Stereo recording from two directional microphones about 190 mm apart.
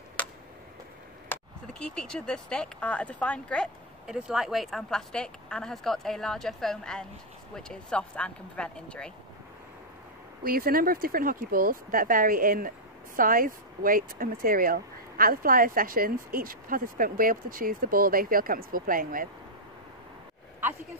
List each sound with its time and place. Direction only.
1.3 s speech: 5° left (ahead or behind)
10.4 s speech: 50° right (ahead or behind)